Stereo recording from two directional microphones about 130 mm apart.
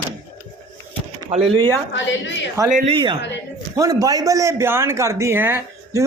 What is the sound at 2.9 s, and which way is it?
Speech, 35° right (ahead or behind).